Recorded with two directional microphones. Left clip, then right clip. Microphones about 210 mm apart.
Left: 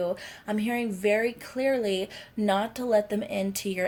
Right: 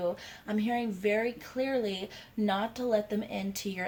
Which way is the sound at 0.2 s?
45° left (ahead or behind).